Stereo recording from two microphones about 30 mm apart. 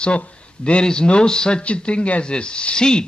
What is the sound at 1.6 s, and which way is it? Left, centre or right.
Speech, left.